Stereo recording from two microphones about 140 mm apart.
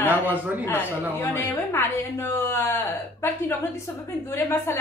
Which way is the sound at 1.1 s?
15° left (ahead or behind).